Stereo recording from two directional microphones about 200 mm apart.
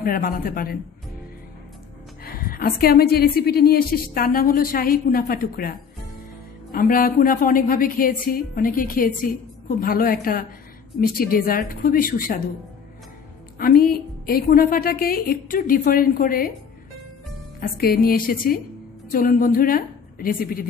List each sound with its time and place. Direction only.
0.0 s a woman's voice: 45° left (ahead or behind)
2.2 s a woman's voice: 45° left (ahead or behind)
13.6 s a woman's voice: 45° left (ahead or behind)
17.6 s a woman's voice: 50° left (ahead or behind)